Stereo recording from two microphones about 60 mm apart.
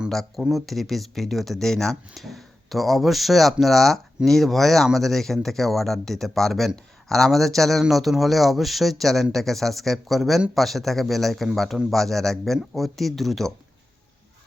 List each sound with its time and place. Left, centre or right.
0.1 s speech: centre